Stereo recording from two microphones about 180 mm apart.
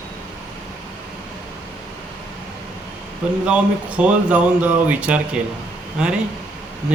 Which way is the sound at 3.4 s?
5° right (ahead or behind).